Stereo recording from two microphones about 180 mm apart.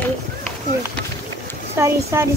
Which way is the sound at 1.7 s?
15° right (ahead or behind).